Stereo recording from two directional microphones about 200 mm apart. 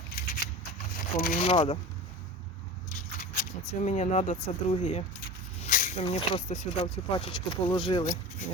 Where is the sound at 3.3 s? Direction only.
40° left (ahead or behind).